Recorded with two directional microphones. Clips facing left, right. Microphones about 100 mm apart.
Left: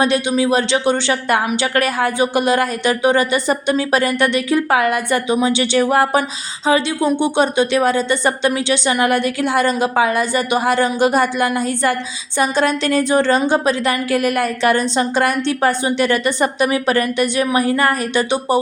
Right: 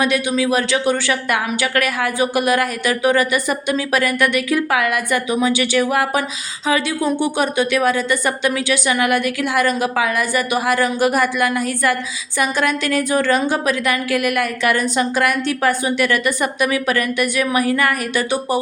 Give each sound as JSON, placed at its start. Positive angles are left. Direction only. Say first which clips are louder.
{"t": 0.0, "sound": "speech", "louder": "left 2 dB", "side_deg": 30}